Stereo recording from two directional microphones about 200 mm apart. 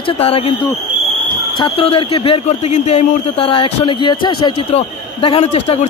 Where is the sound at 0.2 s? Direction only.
30° left (ahead or behind).